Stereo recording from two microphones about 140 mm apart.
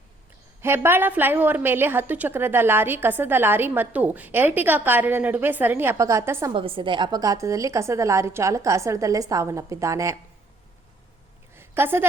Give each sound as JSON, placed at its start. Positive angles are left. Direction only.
{"t": 0.6, "sound": "a woman's voice", "side_deg": -15}
{"t": 6.5, "sound": "a woman's voice", "side_deg": -35}
{"t": 11.5, "sound": "a sound", "side_deg": -15}